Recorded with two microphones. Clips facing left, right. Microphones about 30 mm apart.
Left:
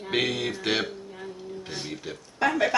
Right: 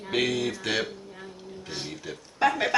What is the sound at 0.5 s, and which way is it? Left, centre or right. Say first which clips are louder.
Speech: left 2 dB; centre.